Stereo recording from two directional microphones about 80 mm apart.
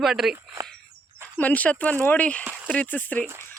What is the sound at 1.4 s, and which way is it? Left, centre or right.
A man's voice, centre.